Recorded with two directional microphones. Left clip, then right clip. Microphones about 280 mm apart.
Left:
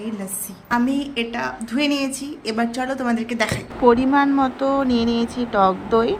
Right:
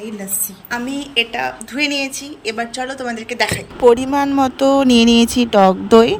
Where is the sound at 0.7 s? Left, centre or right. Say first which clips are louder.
Left 1 dB; centre.